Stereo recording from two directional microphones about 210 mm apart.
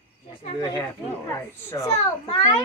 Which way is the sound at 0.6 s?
20° left (ahead or behind).